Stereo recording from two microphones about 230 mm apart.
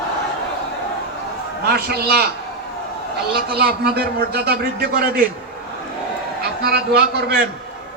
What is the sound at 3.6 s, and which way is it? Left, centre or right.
A man's voice, right.